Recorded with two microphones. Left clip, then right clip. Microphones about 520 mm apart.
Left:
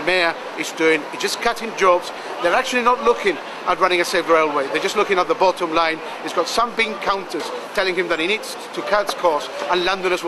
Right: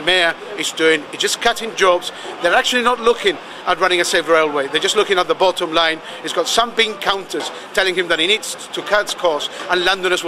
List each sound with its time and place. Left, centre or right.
0.0 s a man's voice: right